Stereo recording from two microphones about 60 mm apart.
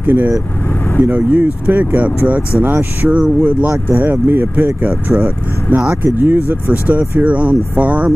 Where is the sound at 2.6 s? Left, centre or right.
Right.